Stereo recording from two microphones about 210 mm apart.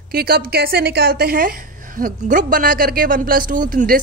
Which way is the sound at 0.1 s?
45° right (ahead or behind).